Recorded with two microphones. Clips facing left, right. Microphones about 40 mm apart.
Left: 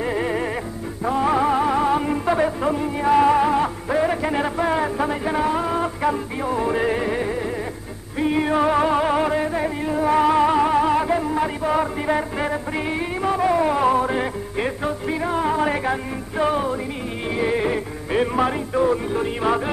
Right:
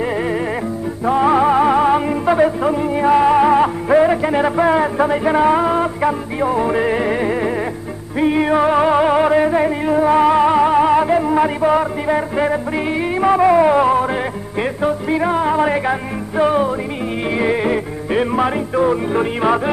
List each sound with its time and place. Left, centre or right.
0.0 s music: centre
1.0 s music: right
2.0 s music: centre
11.8 s music: centre
13.2 s music: right